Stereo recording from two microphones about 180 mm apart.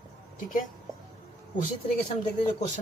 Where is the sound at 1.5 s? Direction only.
45° left (ahead or behind).